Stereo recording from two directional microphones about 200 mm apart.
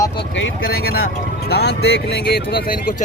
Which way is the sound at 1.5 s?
55° left (ahead or behind).